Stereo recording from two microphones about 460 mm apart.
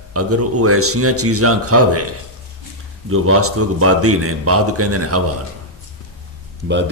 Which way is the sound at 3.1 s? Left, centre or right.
Right.